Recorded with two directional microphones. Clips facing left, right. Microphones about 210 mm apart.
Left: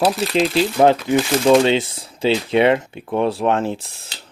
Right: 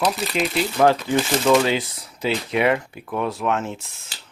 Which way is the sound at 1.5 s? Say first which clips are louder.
Left 4 dB; 25° left (ahead or behind).